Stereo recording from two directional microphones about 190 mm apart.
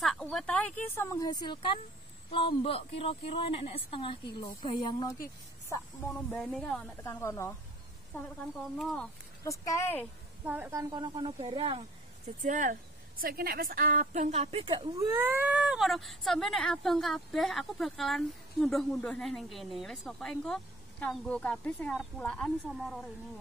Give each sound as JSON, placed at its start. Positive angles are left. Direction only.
{"t": 0.0, "sound": "a woman's voice", "side_deg": 0}
{"t": 6.3, "sound": "a woman's voice", "side_deg": 0}
{"t": 7.1, "sound": "speech", "side_deg": 15}
{"t": 8.7, "sound": "a woman's voice", "side_deg": 0}
{"t": 9.4, "sound": "speech", "side_deg": 15}
{"t": 10.4, "sound": "a woman's voice", "side_deg": -10}
{"t": 12.4, "sound": "speech", "side_deg": -40}
{"t": 13.2, "sound": "a woman's voice", "side_deg": -50}